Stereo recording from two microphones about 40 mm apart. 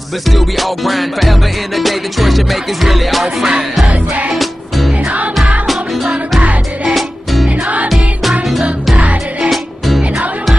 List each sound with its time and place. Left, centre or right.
0.3 s music: centre
3.8 s music: right
4.4 s music: centre
6.9 s music: centre